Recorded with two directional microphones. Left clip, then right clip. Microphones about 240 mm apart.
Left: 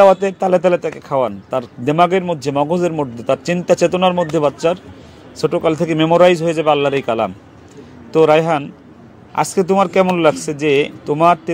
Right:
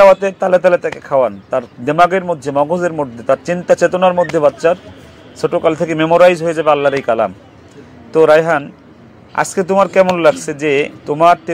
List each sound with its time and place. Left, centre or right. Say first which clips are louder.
0.0 s a man's voice: right 2 dB; left